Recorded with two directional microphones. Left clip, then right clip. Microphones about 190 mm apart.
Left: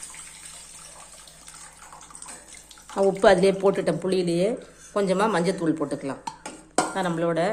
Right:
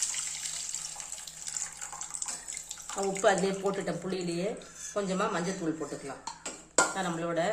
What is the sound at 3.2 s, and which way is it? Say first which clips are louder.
Speech: left 9 dB; 45° left (ahead or behind).